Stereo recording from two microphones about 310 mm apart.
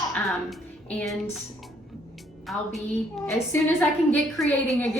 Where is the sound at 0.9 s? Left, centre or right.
Centre.